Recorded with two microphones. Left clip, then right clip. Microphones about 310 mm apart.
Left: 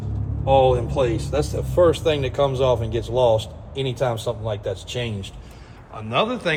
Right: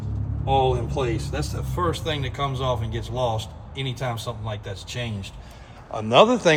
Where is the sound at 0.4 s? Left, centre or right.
Centre.